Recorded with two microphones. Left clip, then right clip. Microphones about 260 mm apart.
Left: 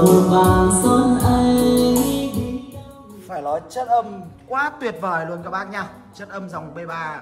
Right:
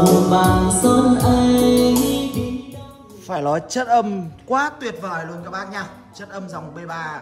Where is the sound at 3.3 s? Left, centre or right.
Right.